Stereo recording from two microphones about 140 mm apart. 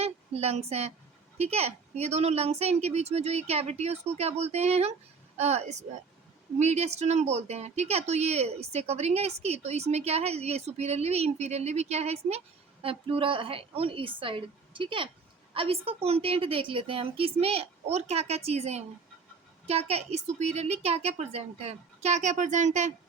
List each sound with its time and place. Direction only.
0.0 s a woman's voice: 50° right (ahead or behind)